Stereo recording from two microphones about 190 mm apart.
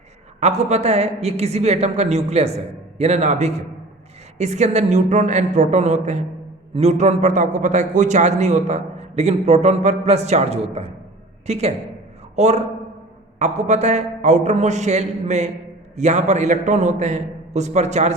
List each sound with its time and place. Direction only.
0.3 s a man's voice: 35° right (ahead or behind)